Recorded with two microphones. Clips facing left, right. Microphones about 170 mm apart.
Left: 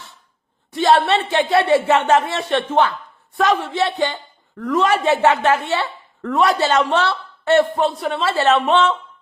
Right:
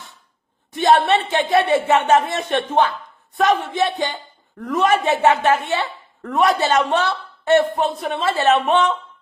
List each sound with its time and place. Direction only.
0.7 s speech: 20° right (ahead or behind)